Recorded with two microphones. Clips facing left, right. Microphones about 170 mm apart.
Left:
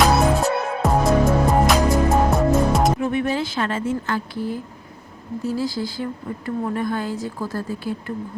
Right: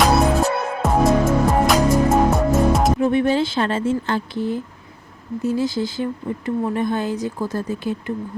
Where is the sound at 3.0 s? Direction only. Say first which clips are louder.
Right 5 dB; 30° right (ahead or behind).